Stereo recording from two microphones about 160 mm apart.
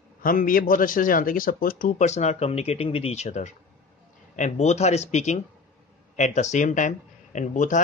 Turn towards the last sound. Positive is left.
turn(degrees=50)  # may be behind; listen again after turning